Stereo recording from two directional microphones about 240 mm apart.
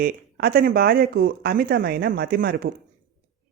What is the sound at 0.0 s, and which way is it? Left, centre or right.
Speech, right.